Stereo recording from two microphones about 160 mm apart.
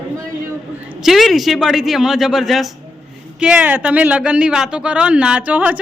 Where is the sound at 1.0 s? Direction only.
Centre (ahead or behind).